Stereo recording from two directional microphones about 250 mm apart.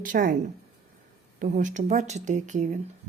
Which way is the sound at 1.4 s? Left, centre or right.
Right.